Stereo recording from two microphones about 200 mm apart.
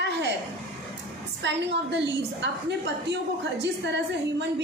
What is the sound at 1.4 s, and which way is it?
A woman's voice, 60° right (ahead or behind).